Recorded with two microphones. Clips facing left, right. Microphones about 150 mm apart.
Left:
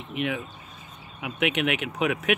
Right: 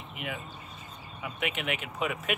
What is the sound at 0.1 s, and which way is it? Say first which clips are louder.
Speech: left 10 dB; 80° left.